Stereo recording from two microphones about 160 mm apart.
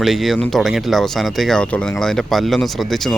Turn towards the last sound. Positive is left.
turn(degrees=0)  # may be behind; listen again after turning